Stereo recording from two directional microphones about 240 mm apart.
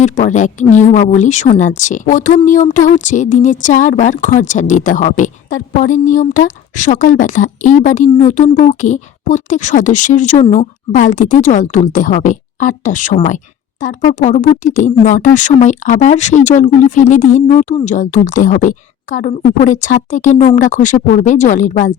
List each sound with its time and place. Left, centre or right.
0.0 s a woman's voice: left
19.7 s a woman's voice: left